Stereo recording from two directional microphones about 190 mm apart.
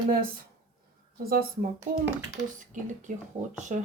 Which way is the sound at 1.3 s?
50° right (ahead or behind).